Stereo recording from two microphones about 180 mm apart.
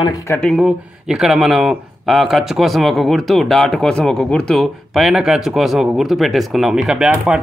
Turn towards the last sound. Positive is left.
turn(degrees=-5)  # may be behind; listen again after turning